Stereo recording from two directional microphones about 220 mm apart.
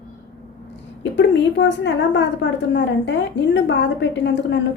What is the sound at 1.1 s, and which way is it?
A woman's voice, 55° left (ahead or behind).